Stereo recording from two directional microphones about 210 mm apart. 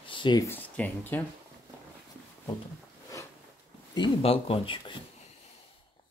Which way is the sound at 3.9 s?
25° left (ahead or behind).